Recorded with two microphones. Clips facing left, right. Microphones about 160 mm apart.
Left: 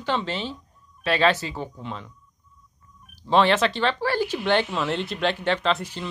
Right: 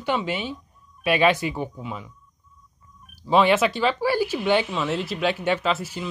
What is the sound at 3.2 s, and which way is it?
Speech, 10° right (ahead or behind).